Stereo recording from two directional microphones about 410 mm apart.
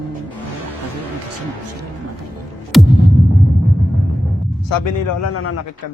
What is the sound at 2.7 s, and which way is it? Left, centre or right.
Music, centre.